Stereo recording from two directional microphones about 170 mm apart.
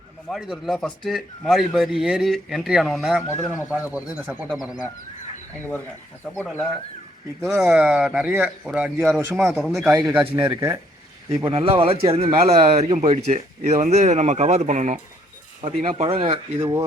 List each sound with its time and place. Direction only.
0.3 s speech: 5° right (ahead or behind)
3.2 s speech: 15° left (ahead or behind)
4.1 s speech: 5° right (ahead or behind)
6.3 s speech: 10° left (ahead or behind)
7.4 s speech: centre (ahead or behind)
10.2 s speech: 10° right (ahead or behind)
11.3 s speech: 30° right (ahead or behind)